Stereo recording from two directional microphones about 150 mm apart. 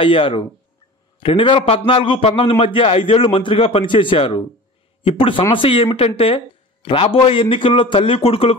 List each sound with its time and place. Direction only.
0.0 s a man's voice: 35° left (ahead or behind)